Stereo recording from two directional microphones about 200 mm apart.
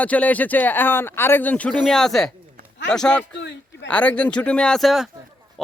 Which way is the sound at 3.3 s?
65° left (ahead or behind).